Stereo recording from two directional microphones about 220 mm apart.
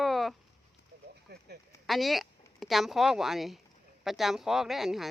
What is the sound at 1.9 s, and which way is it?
Speech, centre (ahead or behind).